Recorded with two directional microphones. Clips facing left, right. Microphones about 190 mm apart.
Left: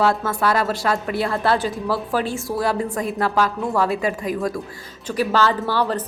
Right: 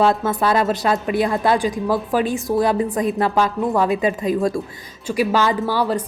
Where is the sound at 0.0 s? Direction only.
20° right (ahead or behind).